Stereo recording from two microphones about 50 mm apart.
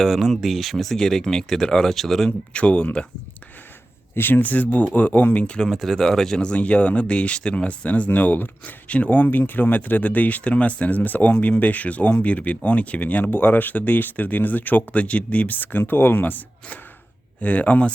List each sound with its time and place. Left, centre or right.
0.0 s speech: centre
2.5 s speech: left
4.1 s speech: left
5.5 s speech: centre
6.4 s speech: left
17.4 s speech: left